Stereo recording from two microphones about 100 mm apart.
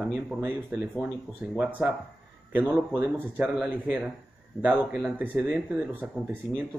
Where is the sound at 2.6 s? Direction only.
15° right (ahead or behind).